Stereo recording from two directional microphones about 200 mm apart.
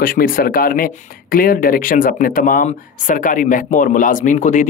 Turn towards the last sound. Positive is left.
turn(degrees=35)  # may be behind; listen again after turning